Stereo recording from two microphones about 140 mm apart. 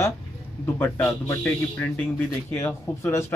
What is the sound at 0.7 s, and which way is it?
Speech, 15° left (ahead or behind).